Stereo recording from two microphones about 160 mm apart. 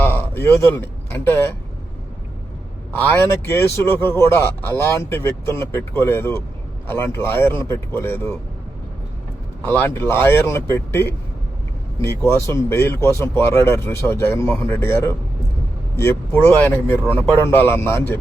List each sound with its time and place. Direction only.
0.0 s a man's voice: 15° left (ahead or behind)
3.1 s speech: 15° left (ahead or behind)
9.6 s speech: 10° left (ahead or behind)